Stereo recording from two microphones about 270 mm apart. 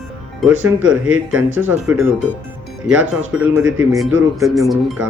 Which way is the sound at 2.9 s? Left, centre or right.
Right.